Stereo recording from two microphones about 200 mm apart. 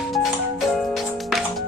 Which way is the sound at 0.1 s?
Centre (ahead or behind).